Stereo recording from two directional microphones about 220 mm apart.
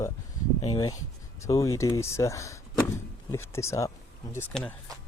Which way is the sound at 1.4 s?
15° left (ahead or behind).